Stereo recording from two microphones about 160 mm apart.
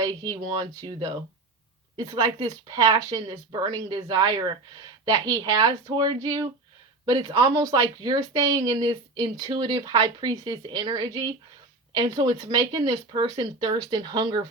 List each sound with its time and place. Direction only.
0.0 s speech: 25° right (ahead or behind)